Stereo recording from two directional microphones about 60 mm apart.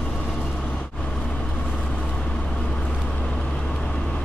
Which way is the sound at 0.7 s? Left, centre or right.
Centre.